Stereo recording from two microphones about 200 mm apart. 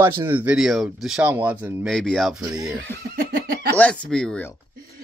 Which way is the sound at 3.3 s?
50° right (ahead or behind).